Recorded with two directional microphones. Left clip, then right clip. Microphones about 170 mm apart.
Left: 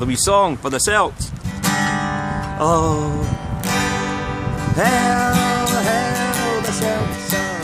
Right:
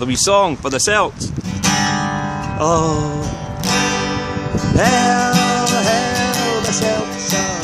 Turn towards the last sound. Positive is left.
turn(degrees=-15)  # may be behind; listen again after turning